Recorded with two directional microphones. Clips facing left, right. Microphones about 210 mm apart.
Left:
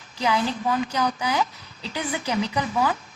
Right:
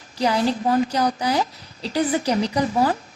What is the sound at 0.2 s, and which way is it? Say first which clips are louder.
A woman's voice: right 4 dB; 40° right (ahead or behind).